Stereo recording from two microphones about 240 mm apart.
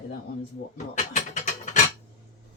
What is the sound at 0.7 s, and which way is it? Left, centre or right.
Speech, left.